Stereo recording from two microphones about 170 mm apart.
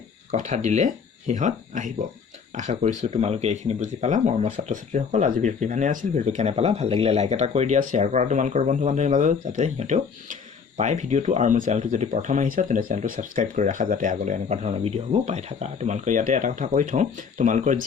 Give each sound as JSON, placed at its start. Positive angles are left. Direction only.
{"t": 0.3, "sound": "speech", "side_deg": -45}